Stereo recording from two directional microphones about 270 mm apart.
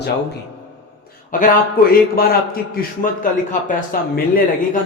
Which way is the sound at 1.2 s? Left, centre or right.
Left.